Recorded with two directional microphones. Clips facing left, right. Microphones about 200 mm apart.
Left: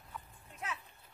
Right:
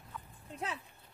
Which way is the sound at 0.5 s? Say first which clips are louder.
Right 4 dB; 30° right (ahead or behind).